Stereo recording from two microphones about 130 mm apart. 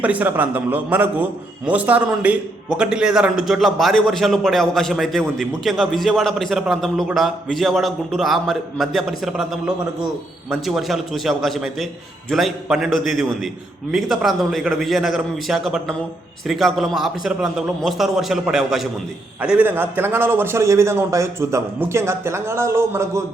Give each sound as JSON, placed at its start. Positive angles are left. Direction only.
{"t": 0.0, "sound": "a man's voice", "side_deg": -10}